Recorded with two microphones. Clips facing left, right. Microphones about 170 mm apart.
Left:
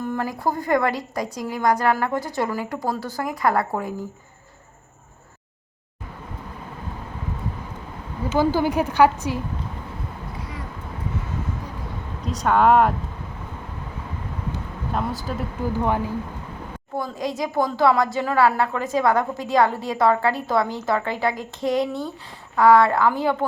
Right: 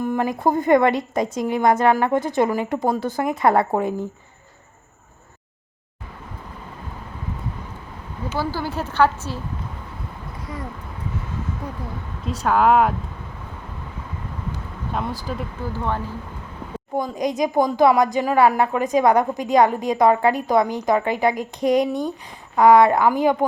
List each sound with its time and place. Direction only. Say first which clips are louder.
0.0 s a woman's voice: right 4 dB; 15° right (ahead or behind)
8.3 s a woman's voice: left 6 dB; 20° left (ahead or behind)
12.2 s speech: even; centre (ahead or behind)
14.9 s speech: even; centre (ahead or behind)
15.6 s a woman's voice: left 4 dB; 15° left (ahead or behind)
17.0 s a woman's voice: right 4 dB; 20° right (ahead or behind)